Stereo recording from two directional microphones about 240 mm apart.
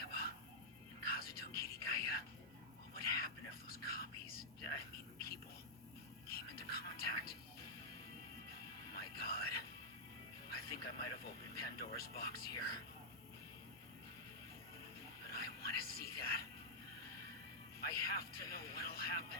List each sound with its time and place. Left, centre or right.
0.0 s music: left
1.0 s whispering: left
6.2 s music: left
8.9 s music: left
15.3 s a sound: left
17.7 s music: left